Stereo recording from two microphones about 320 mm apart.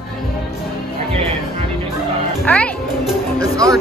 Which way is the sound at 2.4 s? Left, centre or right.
Centre.